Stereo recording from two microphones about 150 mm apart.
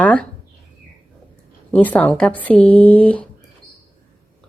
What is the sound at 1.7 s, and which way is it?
Speech, 10° left (ahead or behind).